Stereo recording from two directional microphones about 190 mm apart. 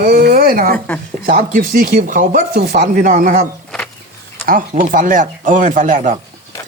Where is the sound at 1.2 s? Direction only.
50° right (ahead or behind).